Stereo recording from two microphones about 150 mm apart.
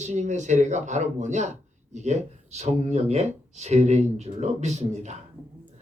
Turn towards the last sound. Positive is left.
turn(degrees=-50)  # may be behind; listen again after turning